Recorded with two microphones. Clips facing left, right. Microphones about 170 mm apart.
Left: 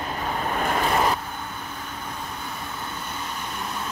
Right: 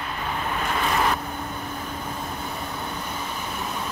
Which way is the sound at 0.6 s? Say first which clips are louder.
Left 4 dB; 45° left (ahead or behind).